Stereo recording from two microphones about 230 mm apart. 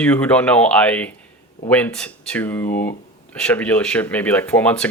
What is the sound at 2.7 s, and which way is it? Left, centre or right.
Speech, left.